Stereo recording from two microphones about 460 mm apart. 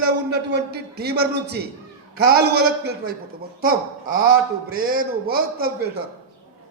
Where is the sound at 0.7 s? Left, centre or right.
Right.